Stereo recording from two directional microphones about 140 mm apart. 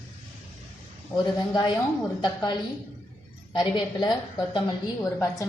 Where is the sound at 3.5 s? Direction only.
35° left (ahead or behind).